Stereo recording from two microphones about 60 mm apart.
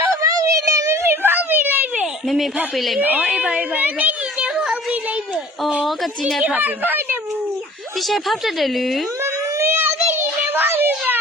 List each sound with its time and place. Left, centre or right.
0.2 s a sound: right
2.2 s a woman's voice: centre
3.0 s a woman's voice: right
3.2 s a woman's voice: centre
4.4 s a sound: centre
5.8 s a woman's voice: centre
6.4 s a woman's voice: right
7.9 s a woman's voice: centre
9.2 s a sound: right